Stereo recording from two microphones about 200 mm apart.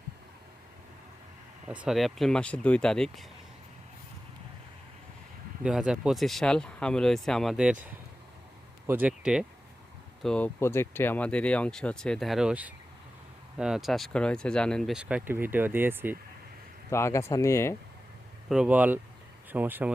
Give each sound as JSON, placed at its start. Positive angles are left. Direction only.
{"t": 1.6, "sound": "speech", "side_deg": -5}
{"t": 5.6, "sound": "speech", "side_deg": -5}
{"t": 10.2, "sound": "speech", "side_deg": 5}
{"t": 16.9, "sound": "speech", "side_deg": 15}
{"t": 18.4, "sound": "speech", "side_deg": -5}